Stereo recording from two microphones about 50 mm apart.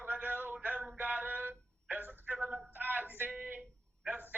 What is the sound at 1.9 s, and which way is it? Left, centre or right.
Telephone, right.